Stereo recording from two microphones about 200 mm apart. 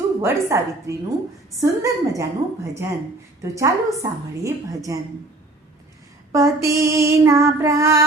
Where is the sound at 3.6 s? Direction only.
15° right (ahead or behind).